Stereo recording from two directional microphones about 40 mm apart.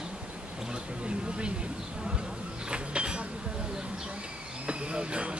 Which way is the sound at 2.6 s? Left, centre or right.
Right.